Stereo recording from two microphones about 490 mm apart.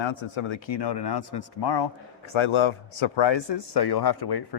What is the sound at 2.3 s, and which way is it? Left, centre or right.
Speech, left.